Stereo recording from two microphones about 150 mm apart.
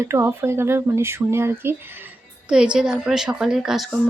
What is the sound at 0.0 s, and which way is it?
Speech, 15° right (ahead or behind).